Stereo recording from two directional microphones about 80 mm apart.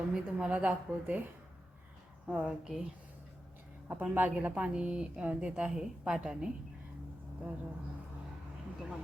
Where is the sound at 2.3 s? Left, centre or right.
Centre.